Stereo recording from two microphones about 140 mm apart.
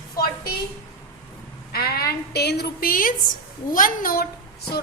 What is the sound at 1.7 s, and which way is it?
A woman's voice, 90° left.